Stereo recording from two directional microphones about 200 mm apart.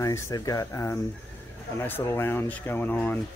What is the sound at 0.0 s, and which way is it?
Speech, 15° left (ahead or behind).